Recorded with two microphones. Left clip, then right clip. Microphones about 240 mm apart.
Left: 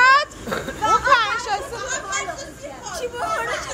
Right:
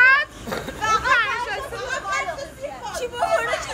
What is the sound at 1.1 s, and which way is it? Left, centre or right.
Children playing, left.